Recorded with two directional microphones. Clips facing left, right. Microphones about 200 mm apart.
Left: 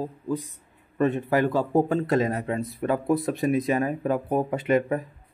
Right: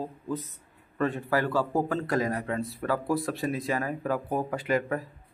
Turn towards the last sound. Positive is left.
turn(degrees=20)  # may be behind; listen again after turning